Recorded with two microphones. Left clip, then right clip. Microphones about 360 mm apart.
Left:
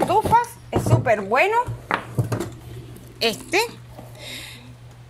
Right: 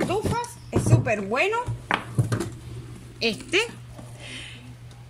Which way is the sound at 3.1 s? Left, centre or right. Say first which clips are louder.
Left 3 dB; centre.